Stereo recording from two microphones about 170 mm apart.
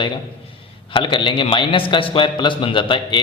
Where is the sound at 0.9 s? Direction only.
30° left (ahead or behind).